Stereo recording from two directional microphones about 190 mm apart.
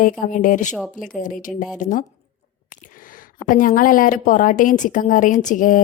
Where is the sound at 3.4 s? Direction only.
45° left (ahead or behind).